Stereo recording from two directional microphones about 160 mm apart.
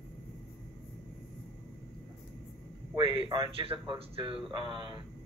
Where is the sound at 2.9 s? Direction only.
30° right (ahead or behind).